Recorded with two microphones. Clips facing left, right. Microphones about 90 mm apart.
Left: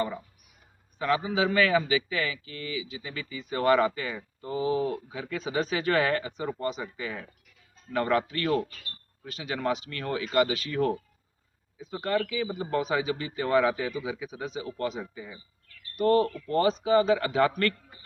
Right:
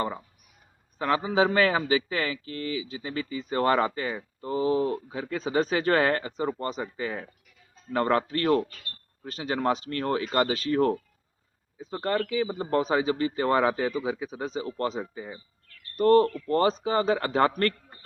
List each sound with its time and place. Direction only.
0.9 s a man's voice: 35° right (ahead or behind)